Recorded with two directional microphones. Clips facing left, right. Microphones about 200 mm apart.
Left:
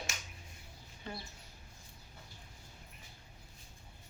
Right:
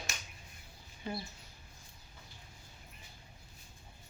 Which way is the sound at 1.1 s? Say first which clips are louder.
Right 5 dB; 10° right (ahead or behind).